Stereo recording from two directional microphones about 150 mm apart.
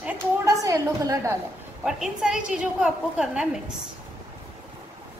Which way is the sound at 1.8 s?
5° right (ahead or behind).